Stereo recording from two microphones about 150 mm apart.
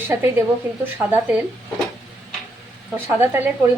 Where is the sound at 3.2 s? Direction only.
15° right (ahead or behind).